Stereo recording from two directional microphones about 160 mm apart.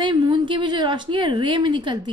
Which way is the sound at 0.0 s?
30° right (ahead or behind).